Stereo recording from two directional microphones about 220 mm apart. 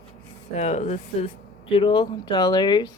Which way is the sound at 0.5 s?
30° left (ahead or behind).